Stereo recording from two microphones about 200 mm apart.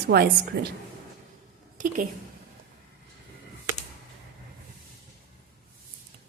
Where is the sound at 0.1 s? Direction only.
50° right (ahead or behind).